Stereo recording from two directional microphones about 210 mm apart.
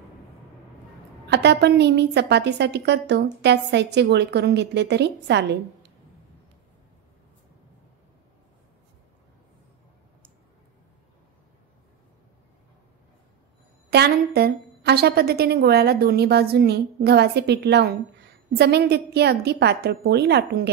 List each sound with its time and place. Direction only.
1.2 s a woman's voice: 55° right (ahead or behind)
13.8 s a woman's voice: 50° right (ahead or behind)